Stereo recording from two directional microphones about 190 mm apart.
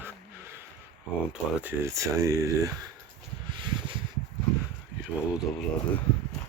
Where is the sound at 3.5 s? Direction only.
25° right (ahead or behind).